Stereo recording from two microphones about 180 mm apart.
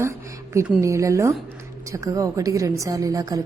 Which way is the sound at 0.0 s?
15° right (ahead or behind).